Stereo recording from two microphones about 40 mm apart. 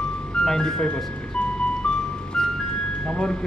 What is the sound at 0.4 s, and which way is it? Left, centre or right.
Speech, centre.